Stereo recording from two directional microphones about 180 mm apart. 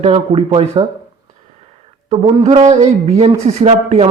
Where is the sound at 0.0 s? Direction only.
35° right (ahead or behind).